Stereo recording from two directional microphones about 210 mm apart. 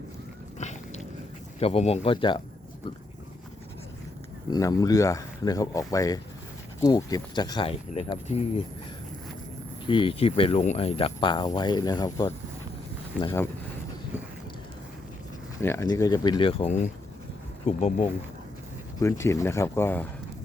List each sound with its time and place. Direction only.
0.6 s biting: 35° left (ahead or behind)
1.5 s speech: 30° left (ahead or behind)
4.5 s speech: 15° left (ahead or behind)
9.8 s speech: 25° left (ahead or behind)
15.6 s speech: 15° left (ahead or behind); by 18.1 s 30° left (ahead or behind)
18.9 s speech: 15° left (ahead or behind)